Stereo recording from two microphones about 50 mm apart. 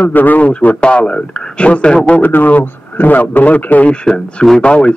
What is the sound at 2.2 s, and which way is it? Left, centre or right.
A man's voice, left.